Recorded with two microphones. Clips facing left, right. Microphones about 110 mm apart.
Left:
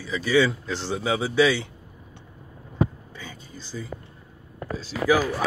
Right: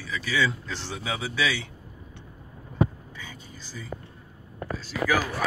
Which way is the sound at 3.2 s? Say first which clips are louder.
Left 4 dB; 30° left (ahead or behind).